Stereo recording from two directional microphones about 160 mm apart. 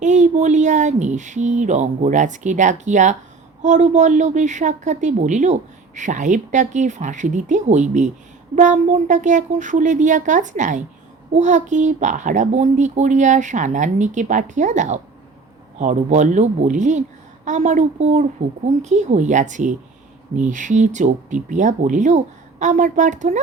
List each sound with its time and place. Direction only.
0.0 s a woman's voice: 50° right (ahead or behind)